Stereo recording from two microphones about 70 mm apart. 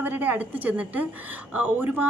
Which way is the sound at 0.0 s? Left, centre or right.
Right.